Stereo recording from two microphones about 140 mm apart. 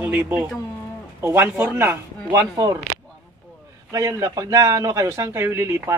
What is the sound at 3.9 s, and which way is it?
A man's voice, 25° right (ahead or behind).